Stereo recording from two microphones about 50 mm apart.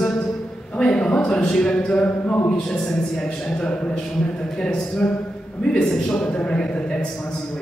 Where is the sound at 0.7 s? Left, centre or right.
Centre.